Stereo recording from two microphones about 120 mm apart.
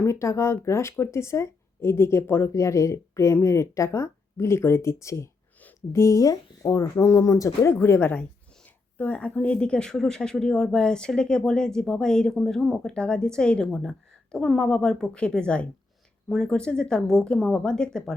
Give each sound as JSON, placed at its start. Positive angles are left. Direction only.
{"t": 0.0, "sound": "speech", "side_deg": 25}
{"t": 5.5, "sound": "a sound", "side_deg": 15}
{"t": 6.0, "sound": "speech", "side_deg": 25}